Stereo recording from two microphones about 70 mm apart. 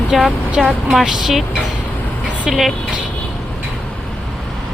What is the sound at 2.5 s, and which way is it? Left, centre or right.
Speech, centre.